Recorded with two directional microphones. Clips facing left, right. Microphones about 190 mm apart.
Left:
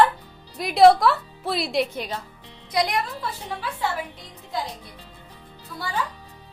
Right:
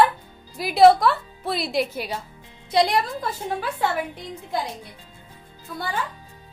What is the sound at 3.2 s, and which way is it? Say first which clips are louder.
Speech: right 4 dB; 50° right (ahead or behind).